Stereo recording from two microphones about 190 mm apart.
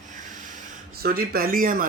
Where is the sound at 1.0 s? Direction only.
55° right (ahead or behind).